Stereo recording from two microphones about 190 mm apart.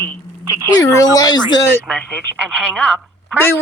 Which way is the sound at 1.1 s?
20° left (ahead or behind).